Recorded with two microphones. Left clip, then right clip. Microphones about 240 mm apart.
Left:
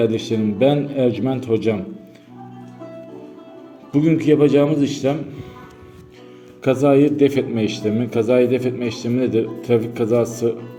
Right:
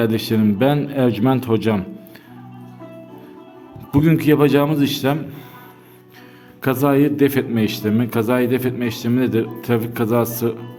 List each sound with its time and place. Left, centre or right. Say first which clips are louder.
0.0 s a man's voice: even; right
3.9 s a man's voice: even; right
6.6 s a man's voice: left 2 dB; right